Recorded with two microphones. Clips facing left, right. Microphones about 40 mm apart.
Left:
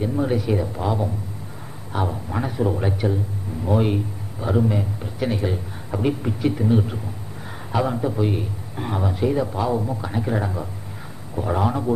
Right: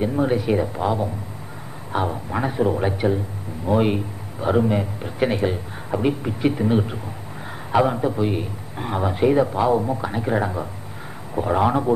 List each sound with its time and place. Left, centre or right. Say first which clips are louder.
0.0 s speech: right 2 dB; centre
5.5 s a man's voice: right 2 dB; centre
9.0 s speech: right 5 dB; right
9.5 s speech: right 4 dB; centre